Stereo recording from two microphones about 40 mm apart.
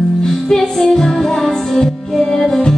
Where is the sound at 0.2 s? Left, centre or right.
Centre.